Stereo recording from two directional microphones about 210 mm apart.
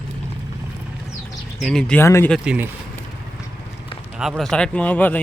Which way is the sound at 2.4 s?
5° right (ahead or behind).